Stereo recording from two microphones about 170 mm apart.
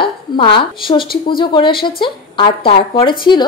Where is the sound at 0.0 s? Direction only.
30° left (ahead or behind).